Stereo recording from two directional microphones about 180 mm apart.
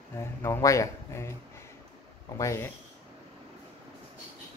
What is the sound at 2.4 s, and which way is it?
Speech, 15° left (ahead or behind).